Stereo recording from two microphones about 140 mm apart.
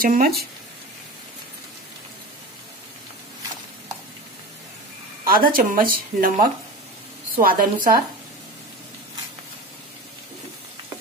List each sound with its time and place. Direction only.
0.0 s speech: 90° right
5.2 s speech: 90° right